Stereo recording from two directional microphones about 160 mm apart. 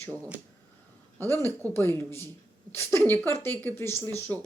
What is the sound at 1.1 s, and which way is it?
Speech, 15° left (ahead or behind).